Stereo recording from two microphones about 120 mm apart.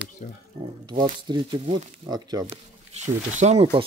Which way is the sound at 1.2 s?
40° right (ahead or behind).